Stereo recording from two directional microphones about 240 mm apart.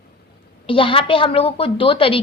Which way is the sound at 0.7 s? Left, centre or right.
Left.